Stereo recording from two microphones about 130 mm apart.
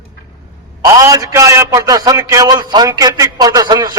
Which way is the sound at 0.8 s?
25° right (ahead or behind).